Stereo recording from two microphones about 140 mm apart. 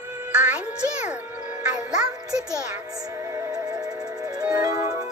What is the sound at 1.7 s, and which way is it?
Music, 5° right (ahead or behind).